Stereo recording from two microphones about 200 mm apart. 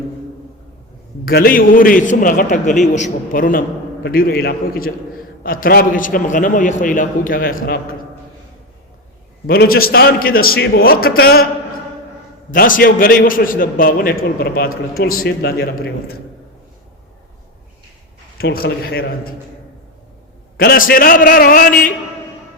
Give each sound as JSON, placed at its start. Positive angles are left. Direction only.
{"t": 1.2, "sound": "a man's voice", "side_deg": 50}
{"t": 9.5, "sound": "a man's voice", "side_deg": 50}
{"t": 12.5, "sound": "a man's voice", "side_deg": 45}
{"t": 18.3, "sound": "a man's voice", "side_deg": 50}
{"t": 20.6, "sound": "a man's voice", "side_deg": 45}